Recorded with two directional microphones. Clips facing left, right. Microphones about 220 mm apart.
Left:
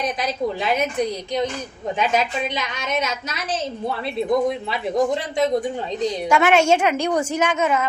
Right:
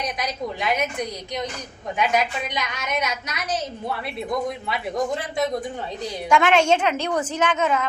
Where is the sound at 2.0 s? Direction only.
25° left (ahead or behind).